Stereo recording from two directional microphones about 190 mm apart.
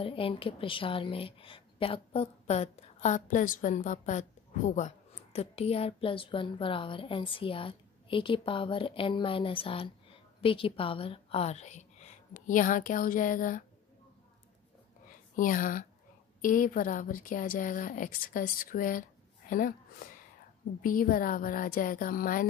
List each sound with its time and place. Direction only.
0.0 s a woman's voice: 30° left (ahead or behind); by 13.7 s 45° left (ahead or behind)
15.3 s a woman's voice: 45° left (ahead or behind)
20.8 s a woman's voice: 50° left (ahead or behind)